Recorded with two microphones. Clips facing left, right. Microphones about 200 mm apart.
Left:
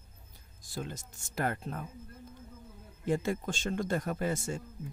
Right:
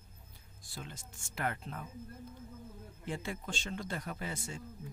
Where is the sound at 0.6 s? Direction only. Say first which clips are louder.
Left 8 dB; 45° left (ahead or behind).